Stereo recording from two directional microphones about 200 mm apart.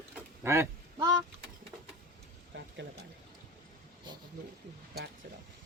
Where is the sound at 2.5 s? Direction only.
65° right (ahead or behind).